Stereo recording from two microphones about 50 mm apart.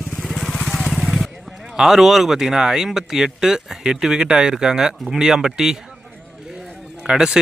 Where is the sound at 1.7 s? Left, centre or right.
Centre.